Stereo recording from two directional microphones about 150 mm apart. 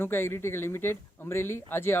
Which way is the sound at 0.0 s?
15° left (ahead or behind).